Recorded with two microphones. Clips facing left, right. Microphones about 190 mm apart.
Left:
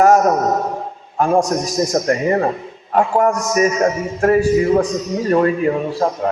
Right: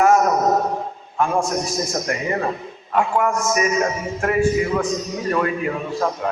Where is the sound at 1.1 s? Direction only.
40° left (ahead or behind).